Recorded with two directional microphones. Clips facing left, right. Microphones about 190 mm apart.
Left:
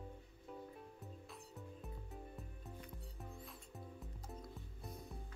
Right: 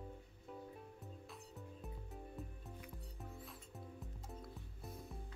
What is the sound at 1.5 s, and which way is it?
Music, centre (ahead or behind).